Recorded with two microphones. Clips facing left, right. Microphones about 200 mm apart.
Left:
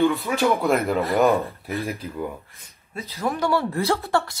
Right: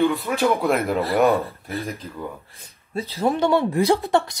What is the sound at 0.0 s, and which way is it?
Speech, centre (ahead or behind).